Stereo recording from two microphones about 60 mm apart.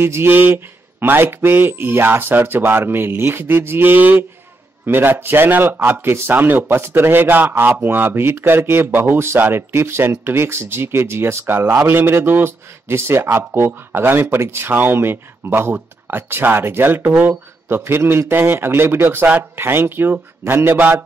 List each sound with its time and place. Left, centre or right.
0.0 s speech: right
14.7 s speech: right
15.0 s speech: right